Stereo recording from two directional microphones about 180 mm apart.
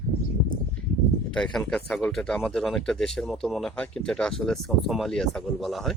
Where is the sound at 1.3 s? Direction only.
5° left (ahead or behind).